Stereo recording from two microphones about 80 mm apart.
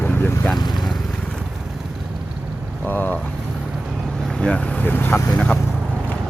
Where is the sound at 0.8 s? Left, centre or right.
Centre.